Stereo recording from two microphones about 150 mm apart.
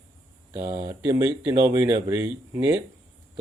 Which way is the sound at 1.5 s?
15° right (ahead or behind).